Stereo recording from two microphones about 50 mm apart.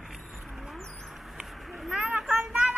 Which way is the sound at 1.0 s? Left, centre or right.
Centre.